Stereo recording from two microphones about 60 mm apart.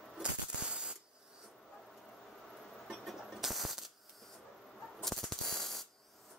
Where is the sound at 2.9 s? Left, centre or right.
Centre.